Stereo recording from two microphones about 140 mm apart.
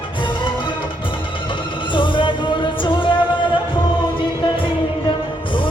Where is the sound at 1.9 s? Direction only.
35° left (ahead or behind).